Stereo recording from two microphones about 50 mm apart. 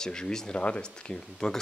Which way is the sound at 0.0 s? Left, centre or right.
Centre.